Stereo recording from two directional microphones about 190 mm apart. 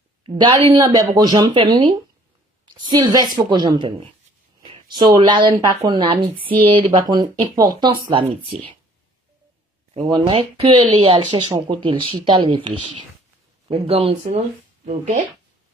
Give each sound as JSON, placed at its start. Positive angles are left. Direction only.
{"t": 0.2, "sound": "a woman's voice", "side_deg": -25}
{"t": 9.9, "sound": "speech", "side_deg": -25}